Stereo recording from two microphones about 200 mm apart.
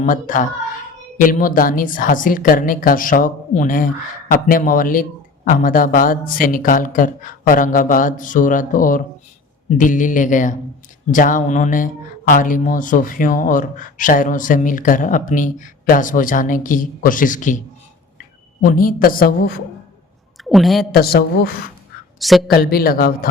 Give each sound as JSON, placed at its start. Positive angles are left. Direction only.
{"t": 0.0, "sound": "speech", "side_deg": 40}
{"t": 18.6, "sound": "speech", "side_deg": 45}
{"t": 20.4, "sound": "a woman's voice", "side_deg": 0}
{"t": 20.9, "sound": "speech", "side_deg": 50}
{"t": 22.2, "sound": "a woman's voice", "side_deg": 0}
{"t": 22.5, "sound": "speech", "side_deg": 50}